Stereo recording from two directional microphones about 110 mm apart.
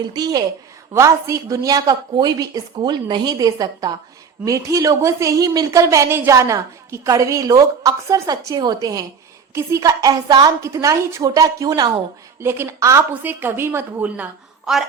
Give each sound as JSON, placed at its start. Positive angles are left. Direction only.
{"t": 0.1, "sound": "speech", "side_deg": -35}
{"t": 12.4, "sound": "a woman's voice", "side_deg": -20}